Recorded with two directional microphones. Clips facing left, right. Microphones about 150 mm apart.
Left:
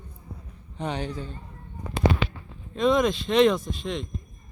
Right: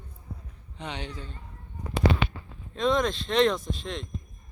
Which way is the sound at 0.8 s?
40° left (ahead or behind).